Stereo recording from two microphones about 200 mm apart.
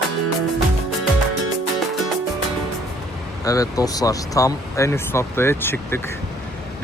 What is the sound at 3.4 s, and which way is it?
Speech, 15° left (ahead or behind).